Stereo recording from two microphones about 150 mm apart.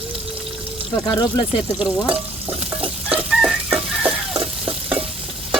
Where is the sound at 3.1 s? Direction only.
5° right (ahead or behind).